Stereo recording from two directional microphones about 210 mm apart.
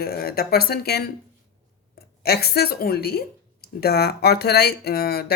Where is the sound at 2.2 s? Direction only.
50° left (ahead or behind).